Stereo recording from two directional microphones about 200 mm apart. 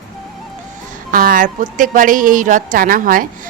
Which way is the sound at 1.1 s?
45° right (ahead or behind).